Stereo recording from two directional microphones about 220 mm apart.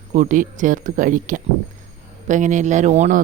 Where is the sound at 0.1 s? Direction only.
35° right (ahead or behind).